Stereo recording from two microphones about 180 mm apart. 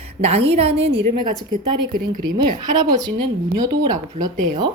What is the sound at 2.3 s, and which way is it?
A woman's voice, 20° right (ahead or behind).